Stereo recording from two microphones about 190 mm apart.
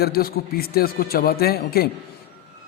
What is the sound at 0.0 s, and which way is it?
A man's voice, 50° left (ahead or behind).